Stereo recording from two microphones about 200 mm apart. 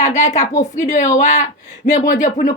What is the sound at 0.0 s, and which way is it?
Speech, 35° left (ahead or behind).